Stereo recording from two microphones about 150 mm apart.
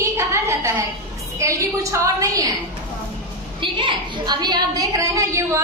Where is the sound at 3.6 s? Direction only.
35° right (ahead or behind).